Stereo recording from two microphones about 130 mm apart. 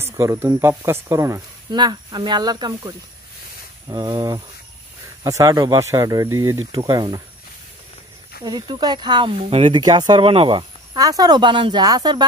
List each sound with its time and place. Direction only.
0.0 s snake: 20° right (ahead or behind)
0.6 s speech: 20° right (ahead or behind)
6.7 s speech: 30° right (ahead or behind)
8.5 s speech: 35° right (ahead or behind)
10.9 s speech: 30° right (ahead or behind)